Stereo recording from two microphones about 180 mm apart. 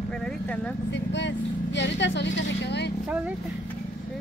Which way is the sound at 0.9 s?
80° left.